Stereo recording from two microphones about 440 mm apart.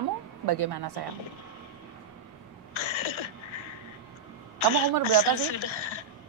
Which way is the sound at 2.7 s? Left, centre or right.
Left.